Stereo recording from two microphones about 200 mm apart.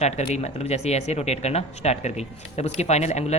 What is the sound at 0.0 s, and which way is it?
Speech, 35° left (ahead or behind).